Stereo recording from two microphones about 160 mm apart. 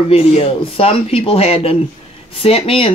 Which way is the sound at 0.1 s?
35° left (ahead or behind).